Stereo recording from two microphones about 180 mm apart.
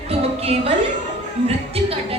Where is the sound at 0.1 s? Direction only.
35° right (ahead or behind).